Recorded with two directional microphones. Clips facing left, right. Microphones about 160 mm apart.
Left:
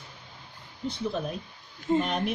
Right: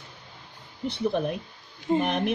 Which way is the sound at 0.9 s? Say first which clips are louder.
Right 5 dB; 65° right (ahead or behind).